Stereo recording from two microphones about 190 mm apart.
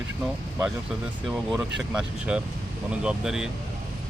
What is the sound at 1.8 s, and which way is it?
Speech, 5° right (ahead or behind).